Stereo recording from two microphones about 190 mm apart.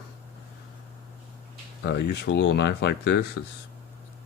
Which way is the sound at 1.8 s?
65° left (ahead or behind).